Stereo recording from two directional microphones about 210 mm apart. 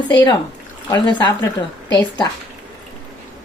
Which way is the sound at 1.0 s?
20° left (ahead or behind).